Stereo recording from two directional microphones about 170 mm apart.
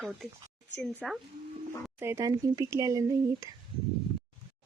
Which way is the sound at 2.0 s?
20° right (ahead or behind).